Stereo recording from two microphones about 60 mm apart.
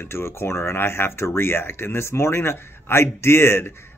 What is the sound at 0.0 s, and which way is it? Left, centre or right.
A man's voice, left.